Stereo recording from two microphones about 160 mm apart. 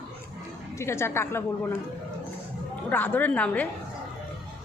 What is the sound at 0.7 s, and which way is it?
Speech, 15° left (ahead or behind).